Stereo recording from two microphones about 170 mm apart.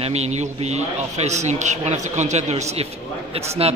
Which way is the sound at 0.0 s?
40° right (ahead or behind).